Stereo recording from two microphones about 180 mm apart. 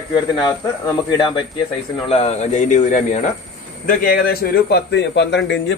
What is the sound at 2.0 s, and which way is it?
A man's voice, 35° left (ahead or behind).